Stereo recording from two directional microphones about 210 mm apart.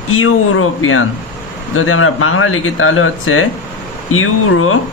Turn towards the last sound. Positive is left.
turn(degrees=85)